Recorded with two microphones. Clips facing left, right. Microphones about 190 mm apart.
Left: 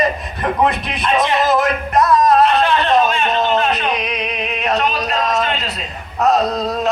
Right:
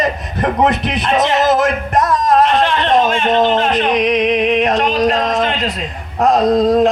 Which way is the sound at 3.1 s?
45° right (ahead or behind).